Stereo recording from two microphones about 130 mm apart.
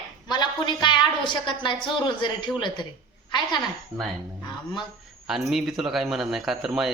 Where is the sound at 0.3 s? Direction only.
35° left (ahead or behind).